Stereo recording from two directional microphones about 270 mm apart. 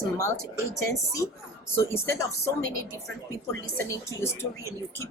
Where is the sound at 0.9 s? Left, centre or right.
Centre.